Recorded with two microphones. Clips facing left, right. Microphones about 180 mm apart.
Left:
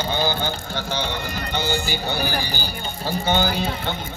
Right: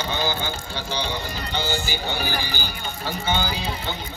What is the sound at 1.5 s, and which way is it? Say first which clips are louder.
Speech: left 2 dB; 45° left (ahead or behind).